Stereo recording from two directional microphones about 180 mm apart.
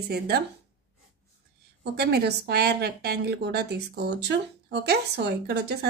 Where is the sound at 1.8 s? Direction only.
65° right (ahead or behind).